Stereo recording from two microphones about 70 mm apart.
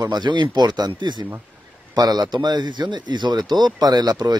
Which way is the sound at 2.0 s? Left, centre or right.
Right.